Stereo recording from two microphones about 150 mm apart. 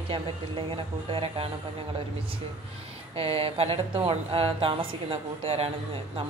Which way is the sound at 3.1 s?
40° right (ahead or behind).